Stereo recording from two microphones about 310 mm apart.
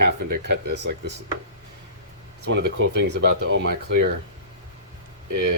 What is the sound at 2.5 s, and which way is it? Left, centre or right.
Speech, right.